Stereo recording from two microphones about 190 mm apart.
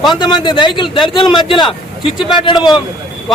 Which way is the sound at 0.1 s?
25° left (ahead or behind).